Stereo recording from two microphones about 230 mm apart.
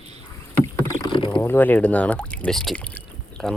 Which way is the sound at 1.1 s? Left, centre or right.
Left.